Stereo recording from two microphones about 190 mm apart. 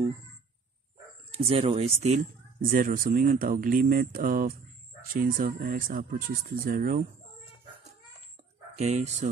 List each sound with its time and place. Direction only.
1.3 s speech: 30° right (ahead or behind)
8.7 s speech: 35° right (ahead or behind)